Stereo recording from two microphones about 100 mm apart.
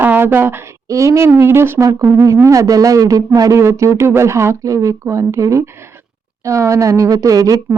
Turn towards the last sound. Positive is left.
turn(degrees=-35)  # may be behind; listen again after turning